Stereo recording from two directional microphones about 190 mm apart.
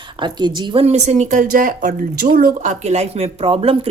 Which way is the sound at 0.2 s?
25° right (ahead or behind).